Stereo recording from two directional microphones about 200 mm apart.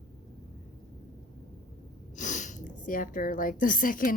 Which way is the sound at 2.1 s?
40° left (ahead or behind).